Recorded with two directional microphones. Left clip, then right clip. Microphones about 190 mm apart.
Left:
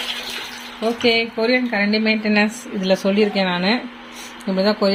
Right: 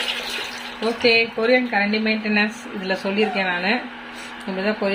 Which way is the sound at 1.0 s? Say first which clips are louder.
Right 1 dB; 35° left (ahead or behind).